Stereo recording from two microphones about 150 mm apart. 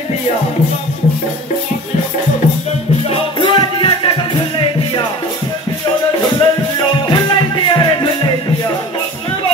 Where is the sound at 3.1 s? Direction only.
30° left (ahead or behind).